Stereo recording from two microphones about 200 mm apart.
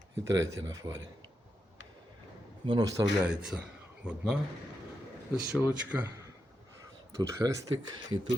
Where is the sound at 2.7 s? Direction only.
20° right (ahead or behind).